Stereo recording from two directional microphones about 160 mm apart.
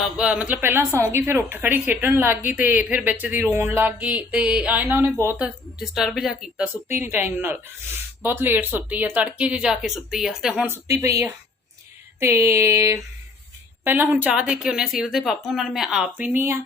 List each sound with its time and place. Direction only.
0.0 s a woman's voice: 5° right (ahead or behind)
5.8 s a woman's voice: centre (ahead or behind)
6.8 s a woman's voice: 15° right (ahead or behind)
10.7 s a woman's voice: 20° right (ahead or behind)